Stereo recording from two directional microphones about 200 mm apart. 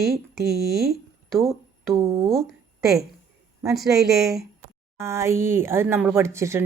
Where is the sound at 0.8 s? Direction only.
Centre (ahead or behind).